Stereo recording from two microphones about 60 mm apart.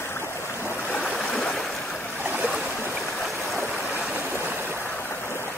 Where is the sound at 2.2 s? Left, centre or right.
Right.